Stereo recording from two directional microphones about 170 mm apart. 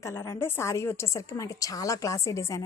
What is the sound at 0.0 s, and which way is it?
A woman's voice, 15° left (ahead or behind).